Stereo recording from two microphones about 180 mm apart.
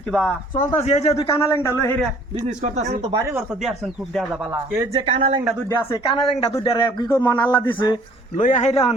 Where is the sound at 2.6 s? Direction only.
40° right (ahead or behind).